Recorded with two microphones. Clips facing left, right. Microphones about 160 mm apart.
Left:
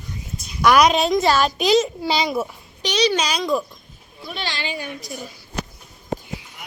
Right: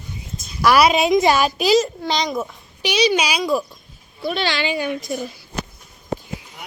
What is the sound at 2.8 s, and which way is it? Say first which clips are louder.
Speech: right 2 dB; 10° right (ahead or behind).